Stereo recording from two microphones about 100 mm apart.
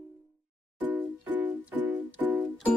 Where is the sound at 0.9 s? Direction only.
15° right (ahead or behind).